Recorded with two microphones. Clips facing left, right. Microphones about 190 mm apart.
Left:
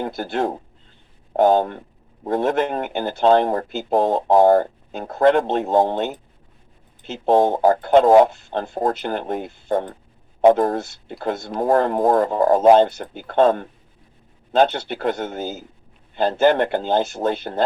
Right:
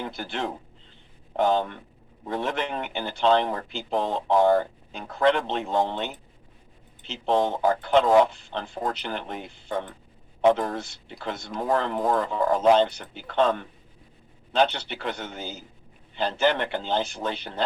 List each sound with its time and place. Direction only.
0.0 s speech: 45° left (ahead or behind)